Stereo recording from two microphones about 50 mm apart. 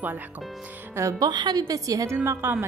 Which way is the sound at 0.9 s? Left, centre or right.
Right.